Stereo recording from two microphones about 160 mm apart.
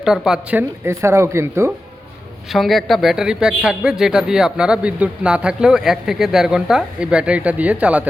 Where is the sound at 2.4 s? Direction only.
Centre (ahead or behind).